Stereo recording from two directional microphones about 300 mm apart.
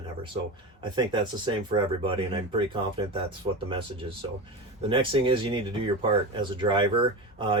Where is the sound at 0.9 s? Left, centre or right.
Centre.